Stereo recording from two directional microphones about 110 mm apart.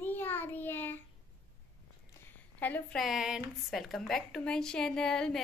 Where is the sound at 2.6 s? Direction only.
15° left (ahead or behind).